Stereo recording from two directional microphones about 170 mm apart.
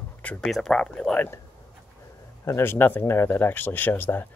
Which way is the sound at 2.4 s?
15° left (ahead or behind).